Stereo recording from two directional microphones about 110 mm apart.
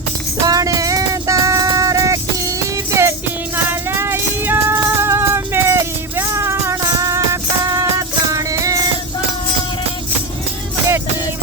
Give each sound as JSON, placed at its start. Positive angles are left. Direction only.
{"t": 0.4, "sound": "music", "side_deg": -30}